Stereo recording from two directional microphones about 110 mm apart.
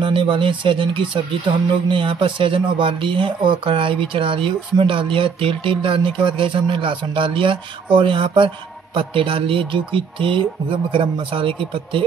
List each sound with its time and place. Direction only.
0.0 s speech: 50° right (ahead or behind)